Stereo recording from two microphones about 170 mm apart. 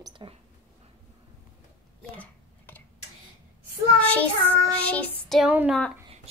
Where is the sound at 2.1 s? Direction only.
10° left (ahead or behind).